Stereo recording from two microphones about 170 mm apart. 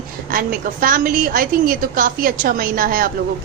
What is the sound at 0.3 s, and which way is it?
A woman's voice, 55° right (ahead or behind).